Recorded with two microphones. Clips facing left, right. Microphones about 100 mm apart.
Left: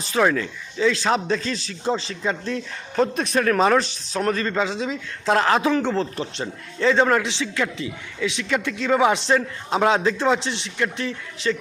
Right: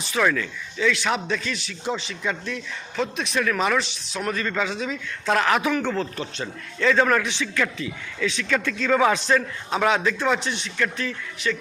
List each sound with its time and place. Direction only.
0.0 s speech: 35° left (ahead or behind)